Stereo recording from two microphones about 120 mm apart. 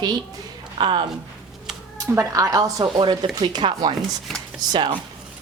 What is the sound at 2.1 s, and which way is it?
Speech, 25° right (ahead or behind).